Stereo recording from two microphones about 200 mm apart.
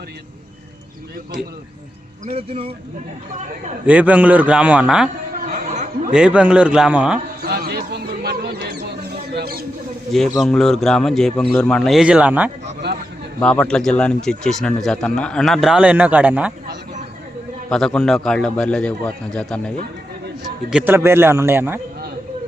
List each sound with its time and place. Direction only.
2.2 s a man's voice: 30° right (ahead or behind)
3.8 s a man's voice: 5° right (ahead or behind)
5.5 s chatter: 40° right (ahead or behind)
6.1 s speech: 5° right (ahead or behind)
7.4 s a sound: 50° right (ahead or behind)
10.1 s speech: centre (ahead or behind)
12.8 s a sound: 55° right (ahead or behind)
13.4 s speech: 5° left (ahead or behind)
17.7 s speech: 5° left (ahead or behind)
20.7 s a man's voice: 5° right (ahead or behind)